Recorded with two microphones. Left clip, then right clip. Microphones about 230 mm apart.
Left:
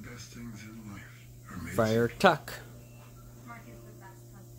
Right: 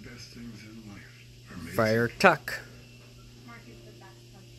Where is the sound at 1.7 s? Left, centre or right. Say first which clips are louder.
Right 2 dB; centre.